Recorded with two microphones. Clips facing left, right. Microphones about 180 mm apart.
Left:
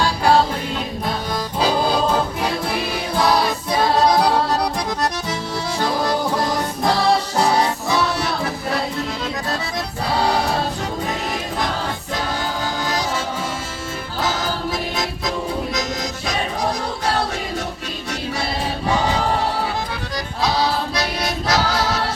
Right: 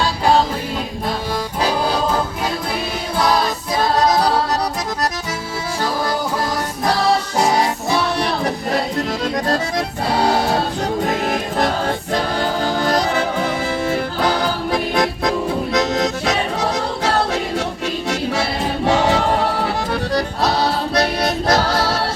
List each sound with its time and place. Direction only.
11.1 s music: 50° right (ahead or behind); by 17.4 s 70° right (ahead or behind)
18.9 s choir: 70° right (ahead or behind)
19.6 s music: 60° right (ahead or behind)